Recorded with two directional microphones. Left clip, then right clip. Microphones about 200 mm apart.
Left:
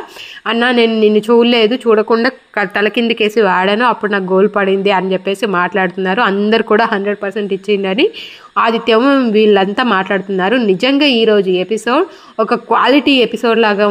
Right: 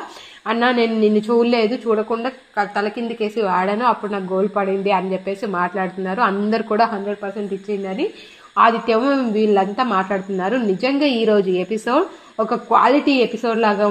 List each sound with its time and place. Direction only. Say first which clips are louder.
0.5 s a woman's voice: left 5 dB; 15° left (ahead or behind)
2.5 s a woman's voice: left 4 dB; 45° left (ahead or behind)
8.5 s a woman's voice: left 3 dB; 20° left (ahead or behind)